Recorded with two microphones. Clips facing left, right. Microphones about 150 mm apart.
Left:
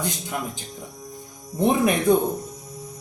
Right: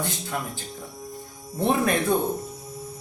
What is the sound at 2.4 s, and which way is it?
Music, 5° right (ahead or behind).